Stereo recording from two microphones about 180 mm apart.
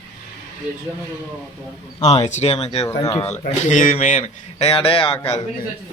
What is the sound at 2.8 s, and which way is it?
Speech, 20° left (ahead or behind).